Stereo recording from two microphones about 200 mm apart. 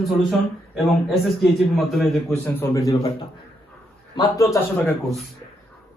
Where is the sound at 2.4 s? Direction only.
15° left (ahead or behind).